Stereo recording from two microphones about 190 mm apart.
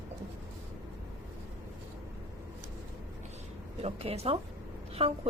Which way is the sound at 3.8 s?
30° right (ahead or behind).